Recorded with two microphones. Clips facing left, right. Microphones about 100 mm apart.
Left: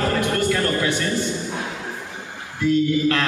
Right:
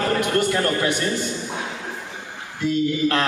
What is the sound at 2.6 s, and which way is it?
Speech, 20° right (ahead or behind).